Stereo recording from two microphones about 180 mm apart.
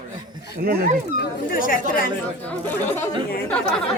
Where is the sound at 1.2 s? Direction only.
50° left (ahead or behind).